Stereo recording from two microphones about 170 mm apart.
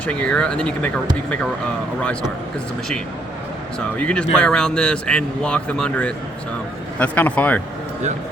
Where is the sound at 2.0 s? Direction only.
5° left (ahead or behind).